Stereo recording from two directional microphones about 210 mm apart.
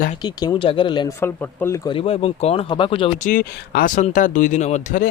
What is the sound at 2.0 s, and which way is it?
Speech, 30° left (ahead or behind).